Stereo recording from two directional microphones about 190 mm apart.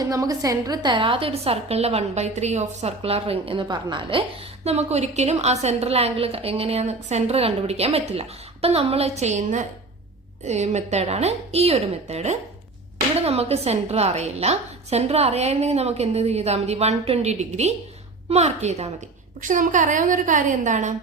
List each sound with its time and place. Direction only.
0.1 s a woman's voice: 20° right (ahead or behind)
4.6 s a woman's voice: 35° right (ahead or behind)